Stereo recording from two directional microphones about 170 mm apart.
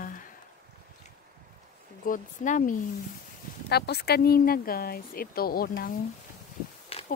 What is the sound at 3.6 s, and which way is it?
Speech, 70° left (ahead or behind).